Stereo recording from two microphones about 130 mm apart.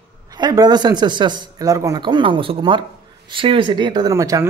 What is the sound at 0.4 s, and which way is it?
A man's voice, 30° right (ahead or behind).